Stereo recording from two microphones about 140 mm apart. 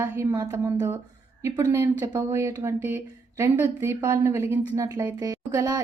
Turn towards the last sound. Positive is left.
turn(degrees=-25)  # may be behind; listen again after turning